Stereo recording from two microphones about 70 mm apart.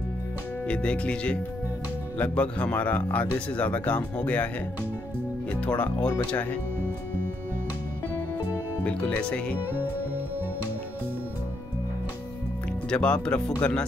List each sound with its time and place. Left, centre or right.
0.7 s speech: centre
5.5 s speech: left
8.8 s speech: centre
12.9 s speech: centre